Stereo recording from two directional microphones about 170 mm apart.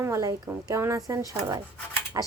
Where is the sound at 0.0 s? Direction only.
20° right (ahead or behind).